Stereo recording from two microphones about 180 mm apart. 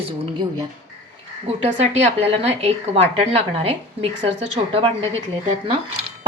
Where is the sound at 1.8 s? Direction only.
35° right (ahead or behind).